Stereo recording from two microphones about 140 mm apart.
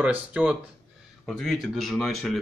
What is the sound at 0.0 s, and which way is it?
A man's voice, 10° right (ahead or behind).